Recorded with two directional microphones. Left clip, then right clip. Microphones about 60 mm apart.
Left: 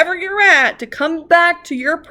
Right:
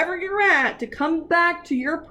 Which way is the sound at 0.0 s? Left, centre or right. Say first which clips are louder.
Left 7 dB; left.